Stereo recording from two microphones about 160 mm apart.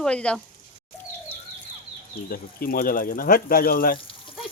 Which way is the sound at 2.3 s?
65° left (ahead or behind).